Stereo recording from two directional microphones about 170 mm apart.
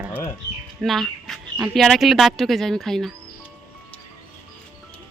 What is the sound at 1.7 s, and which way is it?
Speech, centre (ahead or behind).